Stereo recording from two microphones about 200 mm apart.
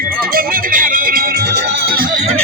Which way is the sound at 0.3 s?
45° right (ahead or behind).